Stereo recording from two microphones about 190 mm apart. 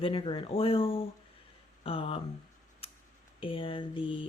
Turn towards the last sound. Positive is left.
turn(degrees=25)  # may be behind; listen again after turning